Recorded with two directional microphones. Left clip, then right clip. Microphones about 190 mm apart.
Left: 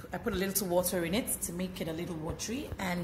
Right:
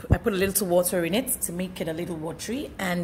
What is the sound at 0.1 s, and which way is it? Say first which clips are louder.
A woman's voice: right 9 dB; 45° right (ahead or behind).